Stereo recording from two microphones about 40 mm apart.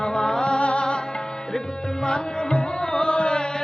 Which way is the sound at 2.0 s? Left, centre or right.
Centre.